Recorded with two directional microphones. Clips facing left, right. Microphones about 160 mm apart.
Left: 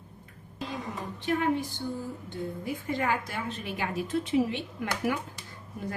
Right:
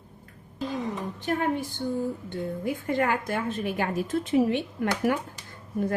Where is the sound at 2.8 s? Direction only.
55° right (ahead or behind).